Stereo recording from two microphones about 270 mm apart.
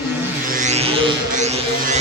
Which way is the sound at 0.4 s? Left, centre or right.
Right.